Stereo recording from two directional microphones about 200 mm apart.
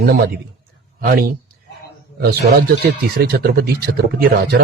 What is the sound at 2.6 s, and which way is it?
A man's voice, 50° right (ahead or behind).